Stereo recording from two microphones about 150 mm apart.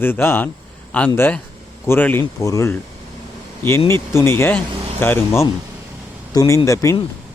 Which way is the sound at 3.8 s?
15° left (ahead or behind).